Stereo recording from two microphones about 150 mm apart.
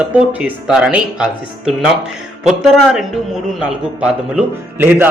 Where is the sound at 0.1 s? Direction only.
10° right (ahead or behind).